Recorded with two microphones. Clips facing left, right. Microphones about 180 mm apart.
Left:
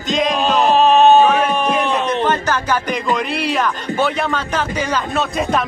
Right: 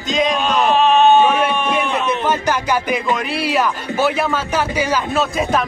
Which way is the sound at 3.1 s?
5° right (ahead or behind).